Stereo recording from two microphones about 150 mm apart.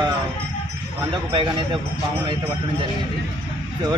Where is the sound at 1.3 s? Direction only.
35° right (ahead or behind).